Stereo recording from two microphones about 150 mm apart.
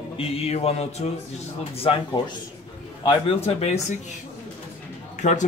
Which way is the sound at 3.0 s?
40° left (ahead or behind).